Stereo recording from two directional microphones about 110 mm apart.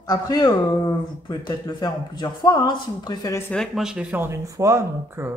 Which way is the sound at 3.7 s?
5° right (ahead or behind).